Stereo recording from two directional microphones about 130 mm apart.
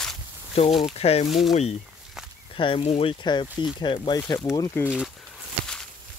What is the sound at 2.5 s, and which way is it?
Speech, 45° left (ahead or behind).